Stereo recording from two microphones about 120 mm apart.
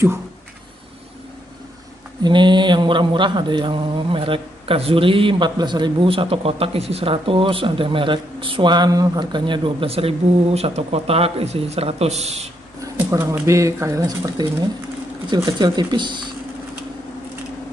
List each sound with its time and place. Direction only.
2.2 s speech: 40° right (ahead or behind); by 12.4 s 65° right (ahead or behind)
12.8 s a sound: 30° right (ahead or behind)
13.3 s speech: 25° right (ahead or behind); by 16.3 s 40° right (ahead or behind)